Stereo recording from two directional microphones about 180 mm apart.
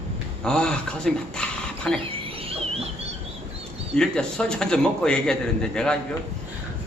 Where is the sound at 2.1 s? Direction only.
30° right (ahead or behind).